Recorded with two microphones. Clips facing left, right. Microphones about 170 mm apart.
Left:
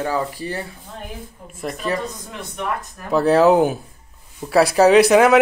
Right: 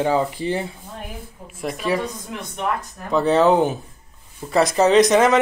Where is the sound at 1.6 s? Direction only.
5° right (ahead or behind).